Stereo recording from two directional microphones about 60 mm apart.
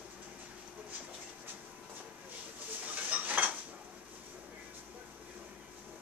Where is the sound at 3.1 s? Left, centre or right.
Right.